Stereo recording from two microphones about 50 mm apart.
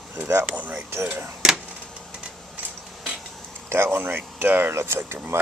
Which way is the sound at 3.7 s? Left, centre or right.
Right.